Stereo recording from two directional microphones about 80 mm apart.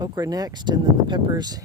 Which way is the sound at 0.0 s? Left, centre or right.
Right.